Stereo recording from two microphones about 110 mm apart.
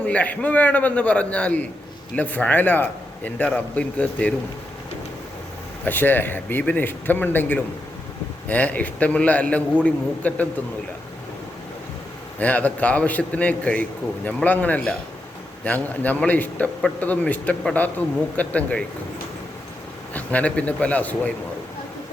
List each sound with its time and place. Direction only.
0.1 s a man's voice: 10° left (ahead or behind)
5.8 s a man's voice: 20° left (ahead or behind)
12.4 s a man's voice: 15° left (ahead or behind)
20.1 s a man's voice: 15° left (ahead or behind)